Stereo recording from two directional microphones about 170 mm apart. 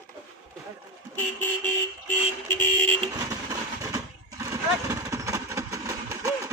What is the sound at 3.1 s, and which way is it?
Vehicle, 20° right (ahead or behind).